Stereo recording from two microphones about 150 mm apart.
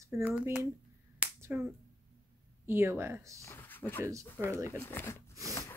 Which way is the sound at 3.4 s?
15° left (ahead or behind).